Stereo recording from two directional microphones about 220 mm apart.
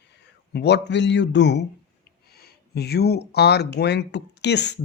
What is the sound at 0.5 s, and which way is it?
Speech, 50° left (ahead or behind).